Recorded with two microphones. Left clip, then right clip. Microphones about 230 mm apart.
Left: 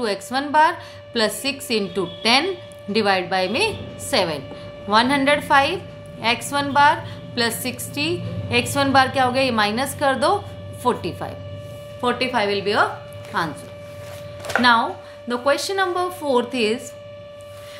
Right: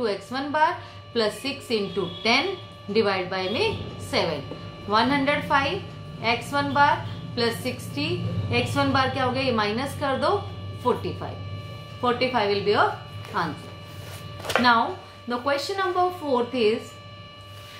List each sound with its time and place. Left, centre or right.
0.0 s a woman's voice: left
15.2 s a woman's voice: left